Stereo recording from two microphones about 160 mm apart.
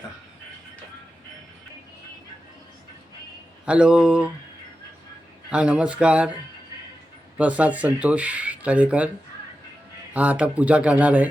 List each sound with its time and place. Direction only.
3.7 s speech: 5° right (ahead or behind)
5.5 s speech: 5° right (ahead or behind)
7.3 s speech: 10° right (ahead or behind)
10.2 s speech: 10° right (ahead or behind)